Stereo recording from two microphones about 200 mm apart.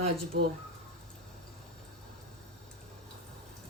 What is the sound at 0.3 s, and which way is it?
Speech, 50° right (ahead or behind).